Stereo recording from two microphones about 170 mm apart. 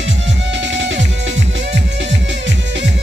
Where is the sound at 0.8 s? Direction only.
90° right.